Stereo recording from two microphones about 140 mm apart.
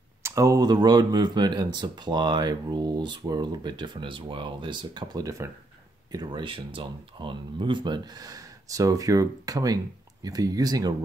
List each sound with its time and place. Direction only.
0.2 s speech: 20° right (ahead or behind)